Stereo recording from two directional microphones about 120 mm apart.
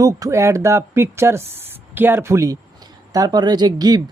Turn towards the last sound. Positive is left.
turn(degrees=-35)  # may be behind; listen again after turning